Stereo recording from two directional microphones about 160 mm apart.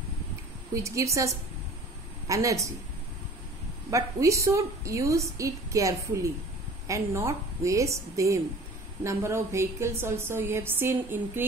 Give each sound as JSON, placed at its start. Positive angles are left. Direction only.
{"t": 0.7, "sound": "a woman's voice", "side_deg": -20}
{"t": 3.9, "sound": "a woman's voice", "side_deg": -20}